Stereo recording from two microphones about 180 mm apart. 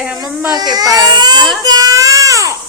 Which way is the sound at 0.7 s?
20° right (ahead or behind).